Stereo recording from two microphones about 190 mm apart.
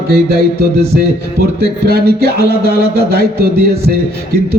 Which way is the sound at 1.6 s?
55° right (ahead or behind).